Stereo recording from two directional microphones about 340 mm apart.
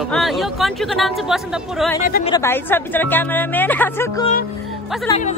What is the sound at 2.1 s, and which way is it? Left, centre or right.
Speech, left.